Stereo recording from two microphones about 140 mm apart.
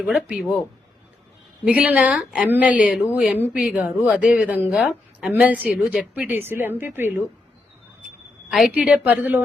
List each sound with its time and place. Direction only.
0.0 s speech: 5° right (ahead or behind)
1.6 s speech: 10° right (ahead or behind)
8.4 s speech: 5° right (ahead or behind)